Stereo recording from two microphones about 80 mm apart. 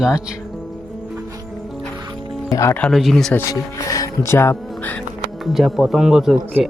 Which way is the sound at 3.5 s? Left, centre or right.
Left.